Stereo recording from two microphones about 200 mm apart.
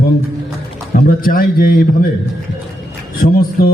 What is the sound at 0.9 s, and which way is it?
Speech, 45° left (ahead or behind).